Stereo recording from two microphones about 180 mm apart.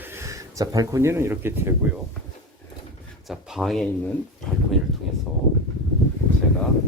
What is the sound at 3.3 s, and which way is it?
Speech, centre (ahead or behind).